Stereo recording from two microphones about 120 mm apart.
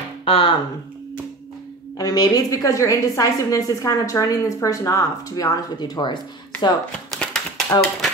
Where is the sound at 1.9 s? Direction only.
35° left (ahead or behind).